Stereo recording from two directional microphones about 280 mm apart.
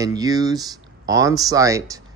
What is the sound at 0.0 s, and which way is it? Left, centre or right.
Speech, centre.